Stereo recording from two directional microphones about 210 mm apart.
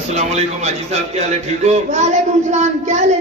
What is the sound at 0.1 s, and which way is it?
A man's voice, 30° right (ahead or behind).